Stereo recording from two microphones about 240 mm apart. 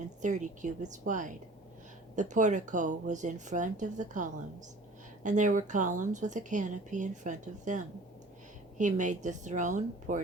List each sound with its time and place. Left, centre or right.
0.2 s speech: right